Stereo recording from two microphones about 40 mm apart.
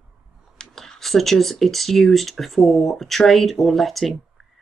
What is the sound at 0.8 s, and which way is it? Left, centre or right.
Speech, centre.